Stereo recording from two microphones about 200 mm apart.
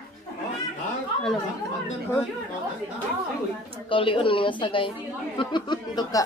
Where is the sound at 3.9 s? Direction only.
25° left (ahead or behind).